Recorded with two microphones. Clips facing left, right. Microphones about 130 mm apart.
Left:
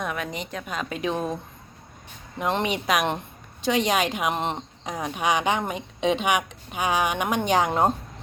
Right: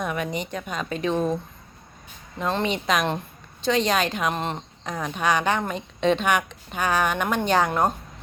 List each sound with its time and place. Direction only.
0.0 s a woman's voice: centre (ahead or behind)
2.4 s speech: 15° left (ahead or behind)
7.7 s a woman's voice: 25° left (ahead or behind)